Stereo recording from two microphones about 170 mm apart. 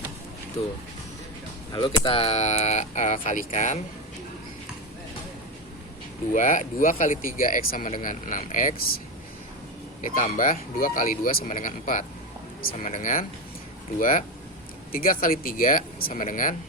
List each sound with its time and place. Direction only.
1.7 s speech: 30° left (ahead or behind)
6.3 s speech: 50° left (ahead or behind)
10.0 s speech: 50° left (ahead or behind)